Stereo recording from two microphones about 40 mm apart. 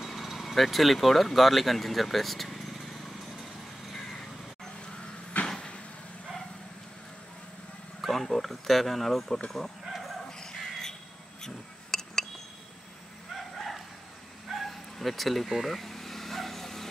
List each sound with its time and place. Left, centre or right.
0.0 s speech: centre
3.9 s vehicle: centre
5.4 s vehicle: left
8.0 s speech: centre
10.4 s a sound: centre
11.4 s cutlery: centre
13.6 s bow-wow: centre
14.5 s vehicle: centre